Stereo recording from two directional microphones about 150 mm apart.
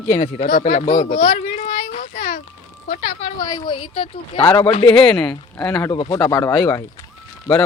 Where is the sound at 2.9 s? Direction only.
60° left (ahead or behind).